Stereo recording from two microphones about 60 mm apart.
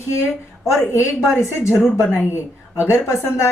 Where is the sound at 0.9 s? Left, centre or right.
Left.